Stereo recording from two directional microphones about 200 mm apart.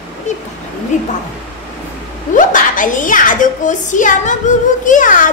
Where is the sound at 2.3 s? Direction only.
40° left (ahead or behind).